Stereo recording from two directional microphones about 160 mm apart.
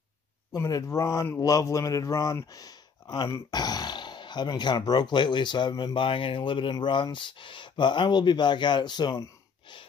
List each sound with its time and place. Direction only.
0.5 s speech: 20° left (ahead or behind)